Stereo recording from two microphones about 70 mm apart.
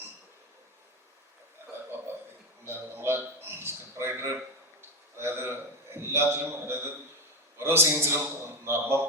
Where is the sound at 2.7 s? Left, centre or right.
Right.